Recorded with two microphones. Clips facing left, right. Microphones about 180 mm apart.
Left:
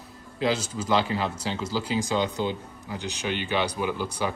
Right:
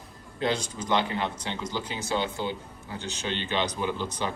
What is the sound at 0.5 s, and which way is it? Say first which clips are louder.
A man's voice: left 2 dB; 5° left (ahead or behind).